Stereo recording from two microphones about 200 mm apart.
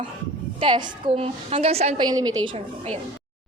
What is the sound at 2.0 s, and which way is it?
Speech, 20° right (ahead or behind).